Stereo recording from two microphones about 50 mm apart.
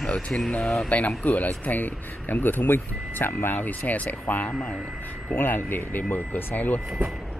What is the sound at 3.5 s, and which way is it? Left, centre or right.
Speech, left.